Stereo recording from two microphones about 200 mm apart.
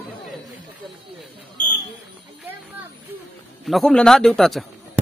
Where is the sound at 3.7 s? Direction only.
Centre (ahead or behind).